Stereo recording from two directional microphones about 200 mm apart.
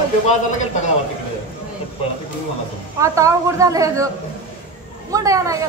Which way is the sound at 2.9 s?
15° right (ahead or behind).